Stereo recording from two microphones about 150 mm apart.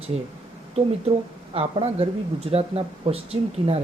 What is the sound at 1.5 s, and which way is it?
Speech, 40° right (ahead or behind).